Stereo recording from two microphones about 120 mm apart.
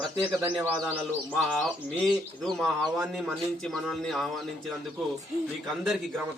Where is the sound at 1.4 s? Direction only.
Centre (ahead or behind).